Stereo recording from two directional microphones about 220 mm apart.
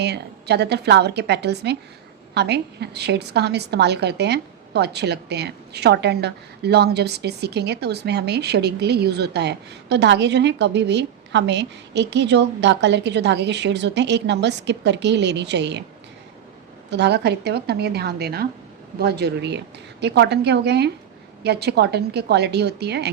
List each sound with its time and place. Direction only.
0.0 s a woman's voice: 50° right (ahead or behind)
16.9 s a woman's voice: 50° right (ahead or behind)